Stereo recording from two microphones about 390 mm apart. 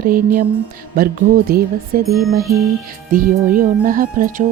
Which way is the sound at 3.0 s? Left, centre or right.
Right.